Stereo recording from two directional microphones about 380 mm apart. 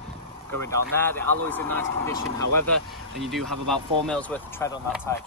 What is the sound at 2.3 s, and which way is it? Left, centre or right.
Speech, right.